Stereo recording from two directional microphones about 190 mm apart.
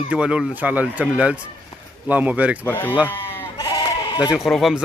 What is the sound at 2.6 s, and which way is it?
Speech, 10° left (ahead or behind).